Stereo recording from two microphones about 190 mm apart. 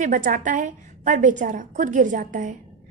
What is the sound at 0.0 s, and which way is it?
A woman's voice, 45° right (ahead or behind).